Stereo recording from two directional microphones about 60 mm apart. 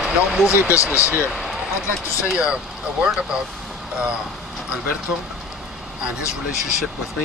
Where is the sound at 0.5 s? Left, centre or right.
Left.